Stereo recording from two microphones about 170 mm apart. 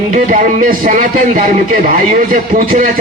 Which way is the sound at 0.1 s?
50° right (ahead or behind).